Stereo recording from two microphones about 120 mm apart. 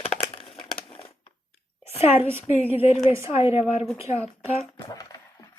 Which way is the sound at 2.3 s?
15° right (ahead or behind).